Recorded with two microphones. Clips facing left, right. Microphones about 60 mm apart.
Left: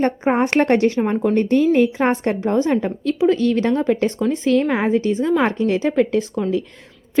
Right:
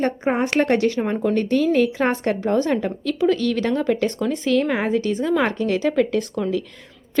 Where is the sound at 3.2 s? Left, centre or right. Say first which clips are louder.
Left 3 dB; left.